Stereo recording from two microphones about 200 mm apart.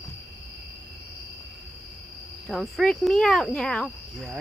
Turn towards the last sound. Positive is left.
turn(degrees=0)  # may be behind; listen again after turning